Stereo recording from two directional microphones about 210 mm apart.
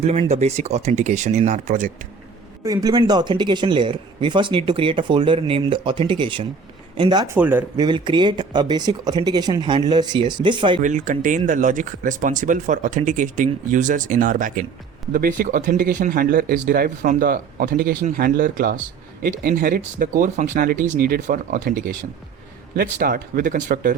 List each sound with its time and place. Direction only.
0.0 s speech: 30° right (ahead or behind)
2.6 s speech: 15° right (ahead or behind)
7.3 s speech: 10° right (ahead or behind)
7.8 s speech: 20° right (ahead or behind)
10.8 s speech: 35° right (ahead or behind)